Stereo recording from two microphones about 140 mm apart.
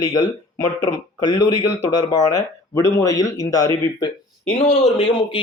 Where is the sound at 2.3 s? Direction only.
25° left (ahead or behind).